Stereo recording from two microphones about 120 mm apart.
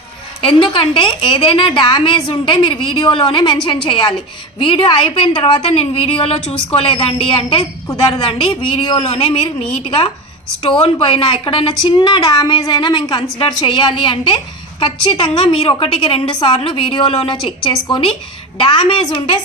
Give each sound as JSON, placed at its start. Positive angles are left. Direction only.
{"t": 0.4, "sound": "a woman's voice", "side_deg": 50}